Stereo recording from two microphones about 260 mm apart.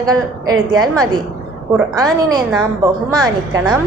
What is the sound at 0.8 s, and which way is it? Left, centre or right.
A woman's voice, centre.